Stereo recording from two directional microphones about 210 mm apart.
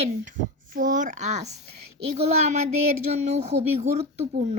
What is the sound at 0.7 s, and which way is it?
Speech, 40° right (ahead or behind).